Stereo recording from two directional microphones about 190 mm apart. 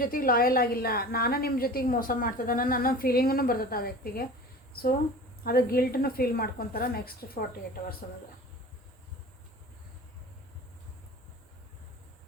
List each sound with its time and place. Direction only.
0.0 s a woman's voice: 50° left (ahead or behind)